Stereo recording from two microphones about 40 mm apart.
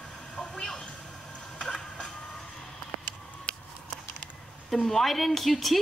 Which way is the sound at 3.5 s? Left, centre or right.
Left.